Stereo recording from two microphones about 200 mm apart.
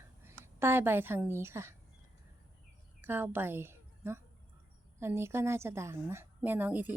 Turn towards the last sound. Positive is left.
turn(degrees=-10)  # may be behind; listen again after turning